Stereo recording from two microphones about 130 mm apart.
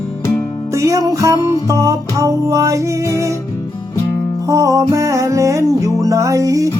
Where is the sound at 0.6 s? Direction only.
25° right (ahead or behind).